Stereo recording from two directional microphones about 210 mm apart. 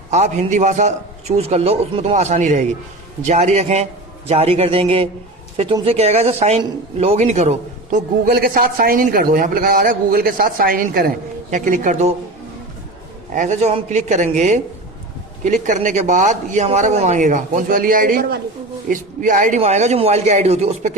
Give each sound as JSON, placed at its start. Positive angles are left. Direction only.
{"t": 0.1, "sound": "a man's voice", "side_deg": -35}
{"t": 13.3, "sound": "a man's voice", "side_deg": -35}